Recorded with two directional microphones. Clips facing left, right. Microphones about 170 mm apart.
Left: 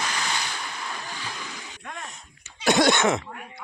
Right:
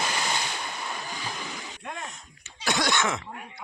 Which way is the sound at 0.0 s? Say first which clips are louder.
Right 1 dB; 15° right (ahead or behind).